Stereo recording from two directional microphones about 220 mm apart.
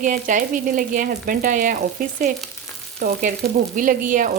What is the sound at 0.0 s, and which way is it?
Speech, 35° right (ahead or behind).